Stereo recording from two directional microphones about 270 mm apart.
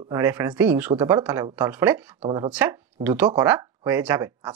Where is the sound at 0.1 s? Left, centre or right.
Centre.